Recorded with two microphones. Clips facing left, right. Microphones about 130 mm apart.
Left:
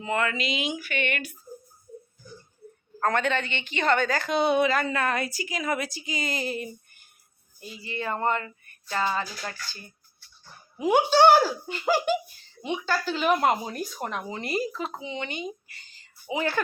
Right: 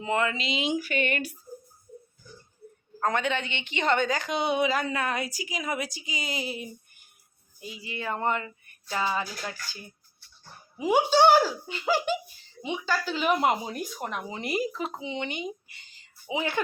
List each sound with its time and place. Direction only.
0.0 s speech: 20° right (ahead or behind)
3.0 s a woman's voice: 15° right (ahead or behind)
11.4 s speech: 45° left (ahead or behind)
13.6 s a woman's voice: 10° right (ahead or behind)